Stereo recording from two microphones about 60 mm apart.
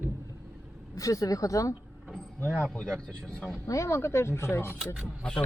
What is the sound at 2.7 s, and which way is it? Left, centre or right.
Speech, centre.